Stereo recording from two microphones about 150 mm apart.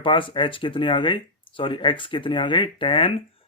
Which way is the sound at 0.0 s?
35° left (ahead or behind).